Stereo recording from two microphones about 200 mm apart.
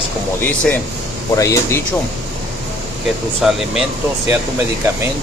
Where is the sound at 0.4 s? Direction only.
10° left (ahead or behind).